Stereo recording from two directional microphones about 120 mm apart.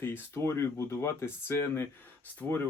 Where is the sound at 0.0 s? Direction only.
20° left (ahead or behind).